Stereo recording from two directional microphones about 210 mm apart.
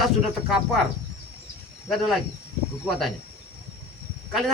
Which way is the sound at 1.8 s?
Centre (ahead or behind).